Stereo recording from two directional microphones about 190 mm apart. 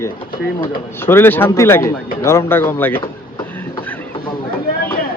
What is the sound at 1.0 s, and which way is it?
A man's voice, 10° left (ahead or behind).